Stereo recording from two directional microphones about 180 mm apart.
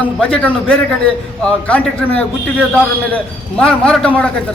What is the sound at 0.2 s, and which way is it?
A man's voice, 5° left (ahead or behind).